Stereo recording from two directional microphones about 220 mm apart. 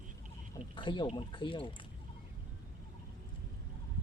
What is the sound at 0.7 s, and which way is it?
Speech, 20° left (ahead or behind).